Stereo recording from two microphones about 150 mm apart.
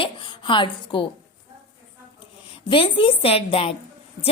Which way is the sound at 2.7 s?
35° left (ahead or behind).